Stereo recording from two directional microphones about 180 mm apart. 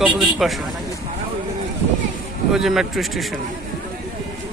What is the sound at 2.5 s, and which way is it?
Speech, centre (ahead or behind).